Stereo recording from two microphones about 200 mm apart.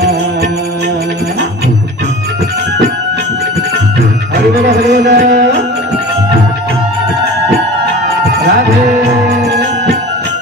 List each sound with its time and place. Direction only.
4.6 s music: 60° right (ahead or behind)